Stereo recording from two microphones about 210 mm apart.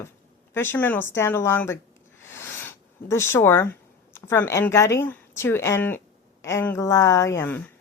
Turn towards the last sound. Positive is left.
turn(degrees=15)  # may be behind; listen again after turning